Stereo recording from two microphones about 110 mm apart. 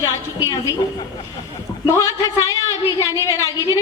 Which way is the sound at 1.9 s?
30° left (ahead or behind).